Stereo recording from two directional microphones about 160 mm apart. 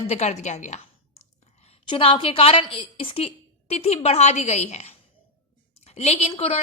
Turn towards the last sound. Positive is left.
turn(degrees=40)  # may be behind; listen again after turning